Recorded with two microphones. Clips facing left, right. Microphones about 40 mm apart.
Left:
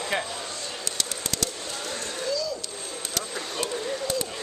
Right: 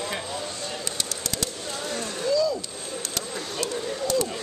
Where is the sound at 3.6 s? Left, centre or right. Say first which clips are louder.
Right 1 dB; left.